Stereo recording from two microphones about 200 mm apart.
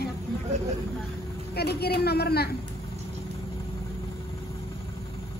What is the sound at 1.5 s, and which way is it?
A woman's voice, 55° left (ahead or behind).